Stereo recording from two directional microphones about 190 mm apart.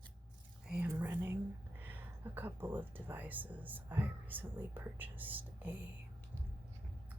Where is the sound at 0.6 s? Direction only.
5° right (ahead or behind).